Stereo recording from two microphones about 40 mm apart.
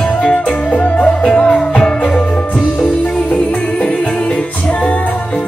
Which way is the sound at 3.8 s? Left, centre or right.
Left.